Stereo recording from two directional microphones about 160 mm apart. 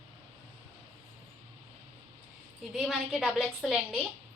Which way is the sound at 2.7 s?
Centre (ahead or behind).